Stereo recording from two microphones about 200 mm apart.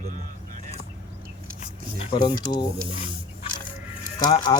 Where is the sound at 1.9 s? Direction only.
25° left (ahead or behind).